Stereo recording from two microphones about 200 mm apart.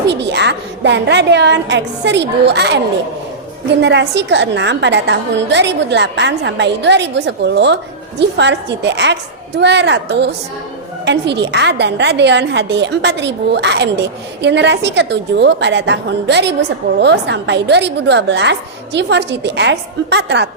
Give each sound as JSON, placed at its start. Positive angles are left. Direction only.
{"t": 0.1, "sound": "a woman's voice", "side_deg": -60}